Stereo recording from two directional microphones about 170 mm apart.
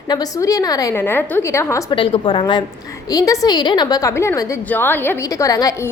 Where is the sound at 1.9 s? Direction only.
30° left (ahead or behind).